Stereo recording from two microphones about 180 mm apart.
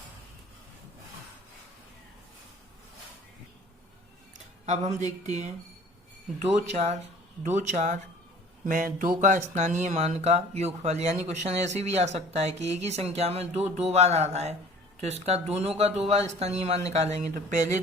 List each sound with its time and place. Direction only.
4.6 s speech: 40° right (ahead or behind)